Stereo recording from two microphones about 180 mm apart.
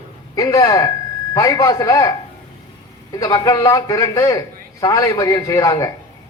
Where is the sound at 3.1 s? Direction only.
20° left (ahead or behind).